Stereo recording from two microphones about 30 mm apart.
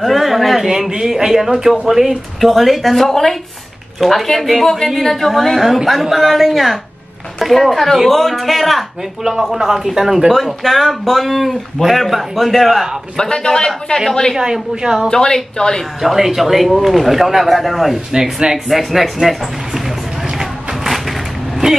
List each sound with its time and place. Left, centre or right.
0.0 s speech: centre
0.7 s speech: centre
2.4 s speech: centre
10.3 s speech: centre
13.2 s a woman's voice: left
14.4 s a woman's voice: right
15.0 s a woman's voice: left
16.0 s speech: centre
18.1 s a woman's voice: centre
18.7 s speech: centre
20.3 s a sound: centre